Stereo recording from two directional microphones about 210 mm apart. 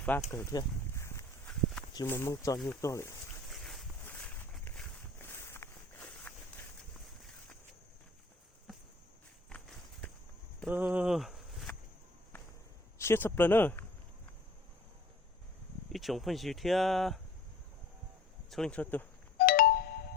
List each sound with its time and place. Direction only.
0.3 s a sound: 15° left (ahead or behind)
1.9 s speech: 15° left (ahead or behind)
3.5 s a sound: centre (ahead or behind)
10.7 s speech: 10° right (ahead or behind)
13.0 s speech: 10° left (ahead or behind)
15.9 s speech: centre (ahead or behind)
18.5 s speech: 5° left (ahead or behind)
19.4 s ringtone: 45° left (ahead or behind)